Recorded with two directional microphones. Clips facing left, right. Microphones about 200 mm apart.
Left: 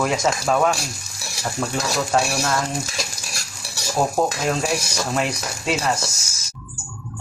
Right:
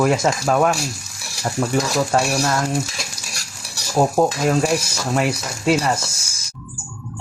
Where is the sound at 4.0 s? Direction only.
15° right (ahead or behind).